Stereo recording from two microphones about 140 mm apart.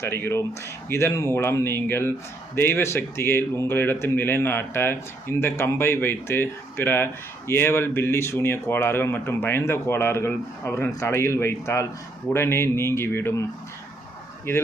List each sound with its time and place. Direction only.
0.0 s speech: 15° left (ahead or behind)